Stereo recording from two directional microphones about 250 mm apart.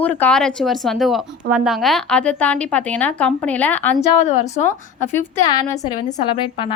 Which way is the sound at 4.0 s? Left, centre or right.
Left.